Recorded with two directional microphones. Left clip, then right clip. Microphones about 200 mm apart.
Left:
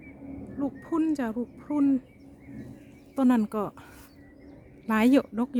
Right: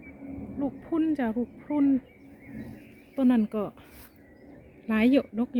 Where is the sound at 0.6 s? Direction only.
5° left (ahead or behind).